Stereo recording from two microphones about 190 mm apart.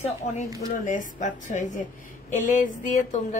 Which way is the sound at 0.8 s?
45° left (ahead or behind).